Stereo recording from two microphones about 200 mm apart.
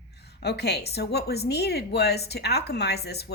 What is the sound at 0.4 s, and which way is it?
A woman's voice, 55° left (ahead or behind).